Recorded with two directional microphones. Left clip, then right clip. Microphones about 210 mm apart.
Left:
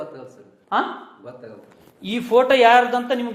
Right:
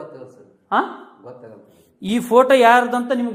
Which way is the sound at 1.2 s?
15° right (ahead or behind).